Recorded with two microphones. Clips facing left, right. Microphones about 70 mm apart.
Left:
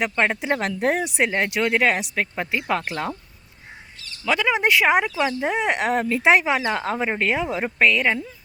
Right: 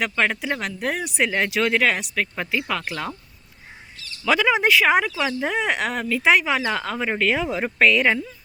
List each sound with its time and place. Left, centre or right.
0.0 s speech: centre
1.8 s speech: centre
4.3 s speech: centre
5.9 s speech: left
6.4 s speech: centre
7.3 s speech: centre
7.9 s speech: centre